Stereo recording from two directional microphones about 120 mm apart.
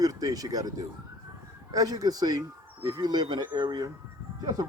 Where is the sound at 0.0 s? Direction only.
30° right (ahead or behind).